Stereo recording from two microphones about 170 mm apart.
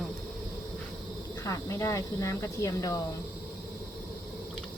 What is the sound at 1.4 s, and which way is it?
Speech, 20° left (ahead or behind).